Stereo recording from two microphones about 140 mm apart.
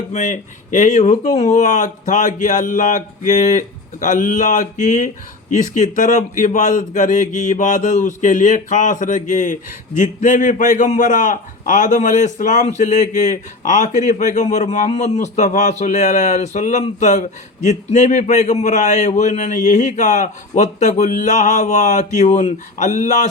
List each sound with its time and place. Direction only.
0.1 s speech: 60° left (ahead or behind)